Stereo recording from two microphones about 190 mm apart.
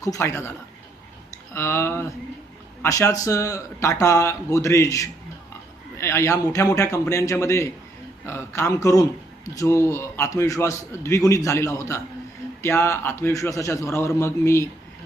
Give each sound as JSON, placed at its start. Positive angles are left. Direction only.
{"t": 0.0, "sound": "a man's voice", "side_deg": 15}
{"t": 1.5, "sound": "a man's voice", "side_deg": 15}